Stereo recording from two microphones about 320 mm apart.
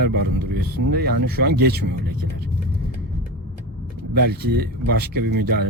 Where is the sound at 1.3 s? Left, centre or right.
Right.